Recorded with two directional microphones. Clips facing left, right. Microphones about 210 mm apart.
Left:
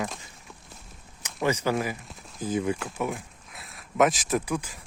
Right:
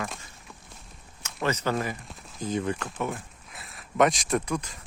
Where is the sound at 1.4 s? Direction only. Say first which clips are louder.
Left 2 dB; 10° left (ahead or behind).